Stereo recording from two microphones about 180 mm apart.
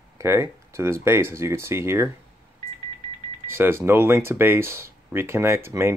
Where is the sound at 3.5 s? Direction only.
15° right (ahead or behind).